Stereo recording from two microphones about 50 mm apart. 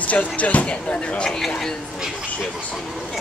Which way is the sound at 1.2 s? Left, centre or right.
Centre.